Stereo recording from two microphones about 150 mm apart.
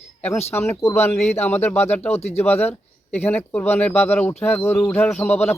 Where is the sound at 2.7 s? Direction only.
45° left (ahead or behind).